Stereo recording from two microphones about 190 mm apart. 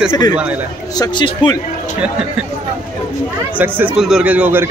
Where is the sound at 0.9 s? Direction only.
20° left (ahead or behind).